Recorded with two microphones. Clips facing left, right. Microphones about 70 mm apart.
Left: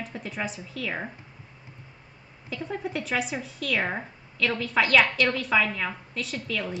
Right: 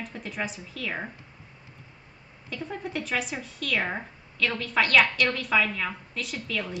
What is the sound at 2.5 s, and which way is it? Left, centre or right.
Speech, centre.